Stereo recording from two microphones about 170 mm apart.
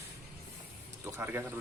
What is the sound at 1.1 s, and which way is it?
Speech, 10° right (ahead or behind).